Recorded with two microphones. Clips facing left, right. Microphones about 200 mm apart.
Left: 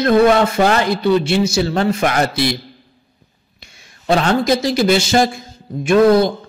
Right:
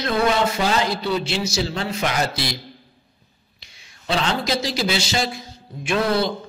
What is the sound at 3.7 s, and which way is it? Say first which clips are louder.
A man's voice: left 8 dB; 50° left (ahead or behind).